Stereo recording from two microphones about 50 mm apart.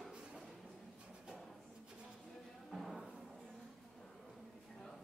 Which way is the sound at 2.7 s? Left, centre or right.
Centre.